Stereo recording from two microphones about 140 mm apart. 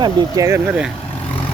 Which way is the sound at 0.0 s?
25° right (ahead or behind).